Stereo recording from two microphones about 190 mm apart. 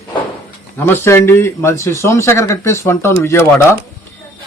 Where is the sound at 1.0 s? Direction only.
15° left (ahead or behind).